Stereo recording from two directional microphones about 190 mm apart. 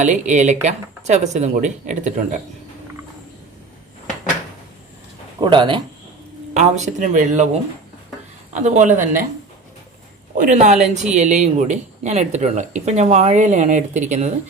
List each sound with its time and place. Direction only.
0.0 s speech: 40° right (ahead or behind)
5.4 s speech: 25° right (ahead or behind)
6.5 s speech: 35° right (ahead or behind)
10.3 s speech: 40° right (ahead or behind)